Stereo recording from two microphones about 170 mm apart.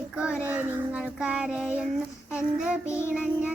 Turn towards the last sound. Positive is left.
turn(degrees=-5)  # may be behind; listen again after turning